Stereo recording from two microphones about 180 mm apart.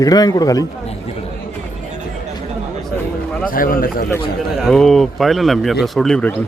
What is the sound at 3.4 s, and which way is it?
Speech, 50° left (ahead or behind).